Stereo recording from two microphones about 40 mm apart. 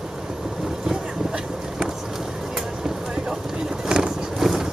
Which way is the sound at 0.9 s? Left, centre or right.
Right.